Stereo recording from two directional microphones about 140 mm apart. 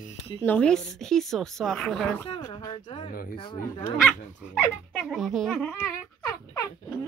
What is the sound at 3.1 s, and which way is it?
Speech, 90° left.